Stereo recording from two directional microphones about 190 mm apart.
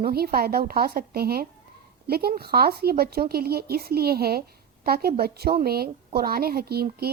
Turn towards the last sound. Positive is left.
turn(degrees=-55)  # may be behind; listen again after turning